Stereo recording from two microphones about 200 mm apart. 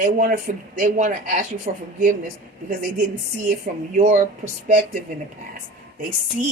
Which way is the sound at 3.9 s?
40° right (ahead or behind).